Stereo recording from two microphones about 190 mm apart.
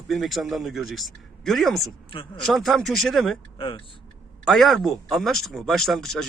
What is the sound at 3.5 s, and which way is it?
Speech, 25° left (ahead or behind).